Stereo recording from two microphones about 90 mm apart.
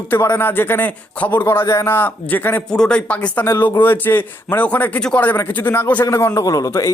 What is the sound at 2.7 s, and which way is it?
Speech, 10° left (ahead or behind).